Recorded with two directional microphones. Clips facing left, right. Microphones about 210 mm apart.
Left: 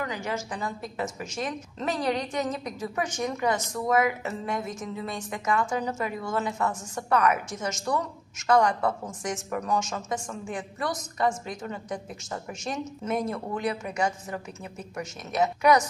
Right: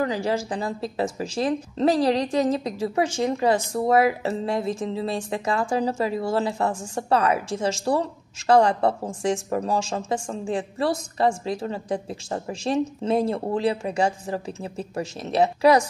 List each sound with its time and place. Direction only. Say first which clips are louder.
0.0 s speech: right 7 dB; 35° right (ahead or behind)